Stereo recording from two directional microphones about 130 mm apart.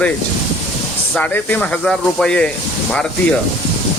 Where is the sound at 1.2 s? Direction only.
10° left (ahead or behind).